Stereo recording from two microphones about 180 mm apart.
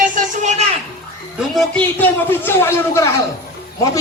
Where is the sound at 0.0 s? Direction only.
45° right (ahead or behind).